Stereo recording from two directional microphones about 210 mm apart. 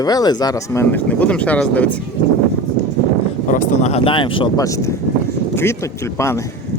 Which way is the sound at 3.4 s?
35° left (ahead or behind).